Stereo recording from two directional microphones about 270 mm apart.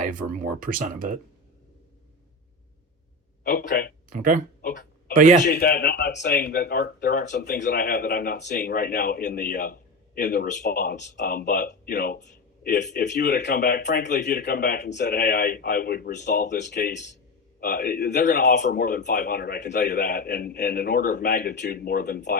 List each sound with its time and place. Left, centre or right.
0.0 s speech: right
3.5 s speech: left
4.1 s speech: right
5.5 s speech: left